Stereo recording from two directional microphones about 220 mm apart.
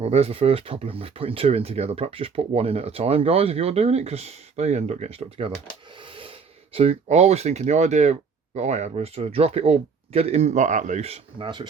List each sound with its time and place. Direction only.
0.0 s speech: 30° right (ahead or behind)
6.0 s a sound: 25° right (ahead or behind)
6.7 s speech: 30° right (ahead or behind)